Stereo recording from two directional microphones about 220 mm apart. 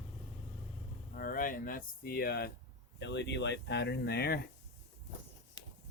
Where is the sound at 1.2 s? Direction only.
40° left (ahead or behind).